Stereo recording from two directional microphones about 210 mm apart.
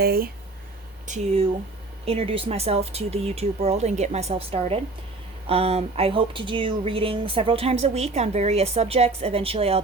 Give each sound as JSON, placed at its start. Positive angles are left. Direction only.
{"t": 0.0, "sound": "speech", "side_deg": -45}
{"t": 1.0, "sound": "speech", "side_deg": -30}